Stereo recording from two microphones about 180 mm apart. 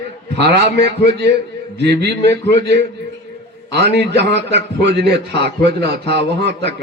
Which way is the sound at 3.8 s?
70° right (ahead or behind).